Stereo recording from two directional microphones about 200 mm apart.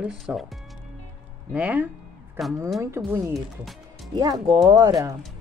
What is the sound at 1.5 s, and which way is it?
Speech, 5° right (ahead or behind).